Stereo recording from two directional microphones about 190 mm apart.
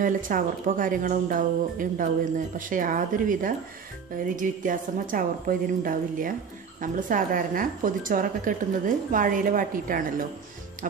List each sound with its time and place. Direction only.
0.0 s speech: 45° right (ahead or behind)